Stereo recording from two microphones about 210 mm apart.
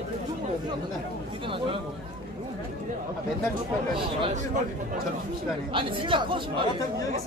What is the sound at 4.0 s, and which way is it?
Speech, 25° right (ahead or behind).